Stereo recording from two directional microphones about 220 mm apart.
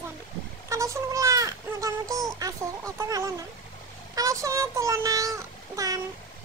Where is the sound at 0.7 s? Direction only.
15° right (ahead or behind).